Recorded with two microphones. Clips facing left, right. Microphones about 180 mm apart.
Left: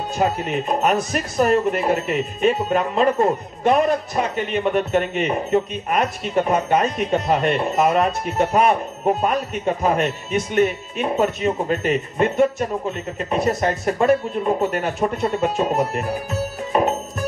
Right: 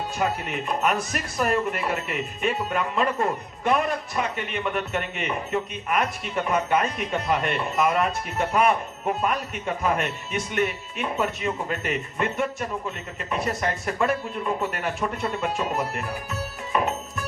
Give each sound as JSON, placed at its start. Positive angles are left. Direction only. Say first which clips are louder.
{"t": 0.2, "sound": "speech", "louder": "left 7 dB", "side_deg": 30}
{"t": 16.3, "sound": "music", "louder": "left 6 dB", "side_deg": 20}